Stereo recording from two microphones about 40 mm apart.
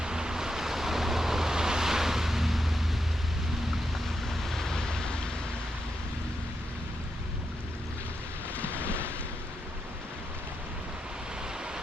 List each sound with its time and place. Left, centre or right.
0.0 s waves: centre
4.3 s waves: centre
8.5 s ocean: left